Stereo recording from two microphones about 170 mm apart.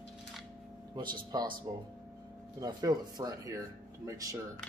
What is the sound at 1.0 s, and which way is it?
Speech, 25° right (ahead or behind).